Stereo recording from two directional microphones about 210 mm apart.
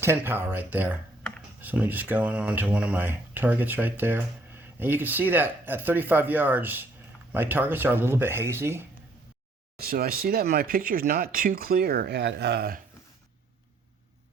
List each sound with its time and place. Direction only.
0.0 s speech: 10° right (ahead or behind)
9.7 s speech: 45° right (ahead or behind)